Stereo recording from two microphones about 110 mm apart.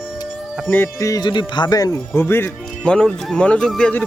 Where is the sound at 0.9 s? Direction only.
30° left (ahead or behind).